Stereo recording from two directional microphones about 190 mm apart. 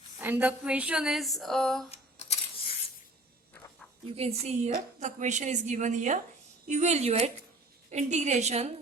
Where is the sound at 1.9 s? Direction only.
35° left (ahead or behind).